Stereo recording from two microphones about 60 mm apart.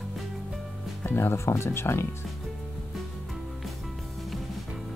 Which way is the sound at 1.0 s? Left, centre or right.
Left.